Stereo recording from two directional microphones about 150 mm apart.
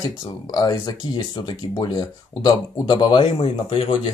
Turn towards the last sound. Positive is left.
turn(degrees=40)  # may be behind; listen again after turning